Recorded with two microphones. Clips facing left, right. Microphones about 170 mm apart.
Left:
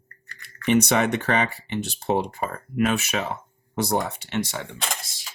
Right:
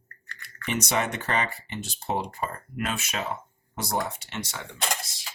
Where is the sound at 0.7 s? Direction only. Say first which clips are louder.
Left 8 dB; 65° left (ahead or behind).